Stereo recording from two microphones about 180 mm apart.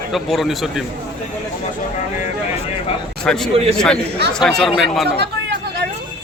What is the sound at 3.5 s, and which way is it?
Speech, 35° right (ahead or behind).